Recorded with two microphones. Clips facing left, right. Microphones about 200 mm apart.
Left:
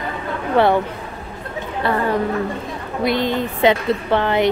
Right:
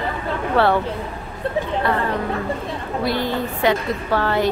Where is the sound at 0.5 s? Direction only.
15° left (ahead or behind).